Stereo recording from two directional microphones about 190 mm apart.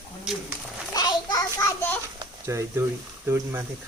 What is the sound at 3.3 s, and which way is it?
Speech, 15° right (ahead or behind).